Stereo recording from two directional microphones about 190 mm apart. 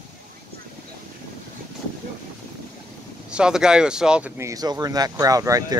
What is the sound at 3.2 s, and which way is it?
Speech, 5° right (ahead or behind).